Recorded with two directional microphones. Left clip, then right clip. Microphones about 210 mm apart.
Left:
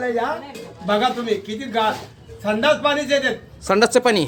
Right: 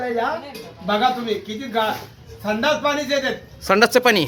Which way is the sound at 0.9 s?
Centre (ahead or behind).